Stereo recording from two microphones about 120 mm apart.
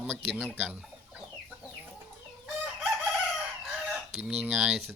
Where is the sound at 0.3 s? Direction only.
10° right (ahead or behind).